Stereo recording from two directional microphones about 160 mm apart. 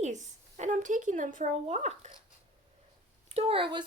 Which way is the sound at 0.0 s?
50° right (ahead or behind).